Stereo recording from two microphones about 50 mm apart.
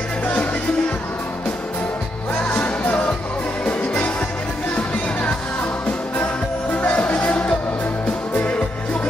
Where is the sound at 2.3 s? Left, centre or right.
Left.